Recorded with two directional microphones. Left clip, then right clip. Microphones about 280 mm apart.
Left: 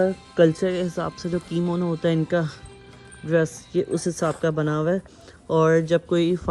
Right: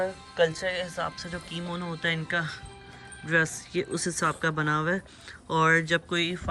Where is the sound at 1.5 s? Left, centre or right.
Centre.